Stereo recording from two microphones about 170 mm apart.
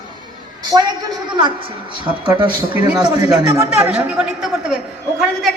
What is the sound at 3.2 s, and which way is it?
Speech, 20° right (ahead or behind).